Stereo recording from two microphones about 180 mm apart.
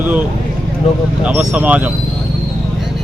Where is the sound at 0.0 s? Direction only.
10° right (ahead or behind).